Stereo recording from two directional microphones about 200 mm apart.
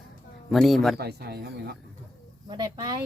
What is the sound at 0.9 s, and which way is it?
Speech, 55° right (ahead or behind).